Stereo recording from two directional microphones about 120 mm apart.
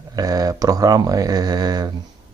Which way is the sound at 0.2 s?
30° right (ahead or behind).